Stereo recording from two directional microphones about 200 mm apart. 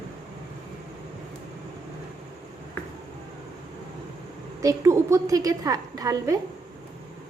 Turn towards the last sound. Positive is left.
turn(degrees=-20)  # may be behind; listen again after turning